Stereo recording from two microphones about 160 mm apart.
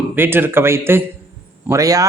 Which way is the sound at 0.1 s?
15° right (ahead or behind).